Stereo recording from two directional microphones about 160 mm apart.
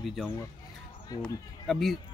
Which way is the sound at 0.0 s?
Centre (ahead or behind).